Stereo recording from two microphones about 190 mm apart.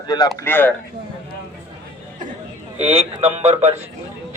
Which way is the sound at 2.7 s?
35° right (ahead or behind).